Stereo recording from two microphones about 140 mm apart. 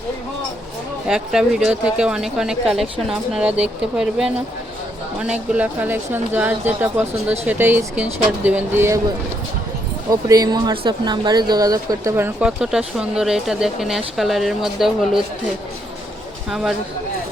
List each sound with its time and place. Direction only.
1.0 s speech: 5° right (ahead or behind)
10.1 s speech: 25° right (ahead or behind)
12.1 s speech: 15° right (ahead or behind)
12.5 s speech: 5° right (ahead or behind)
16.5 s speech: 5° right (ahead or behind)